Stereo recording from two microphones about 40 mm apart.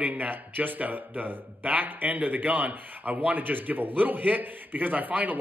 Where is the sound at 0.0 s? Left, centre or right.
Right.